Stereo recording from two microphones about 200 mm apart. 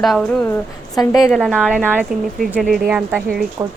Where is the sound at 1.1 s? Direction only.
15° left (ahead or behind).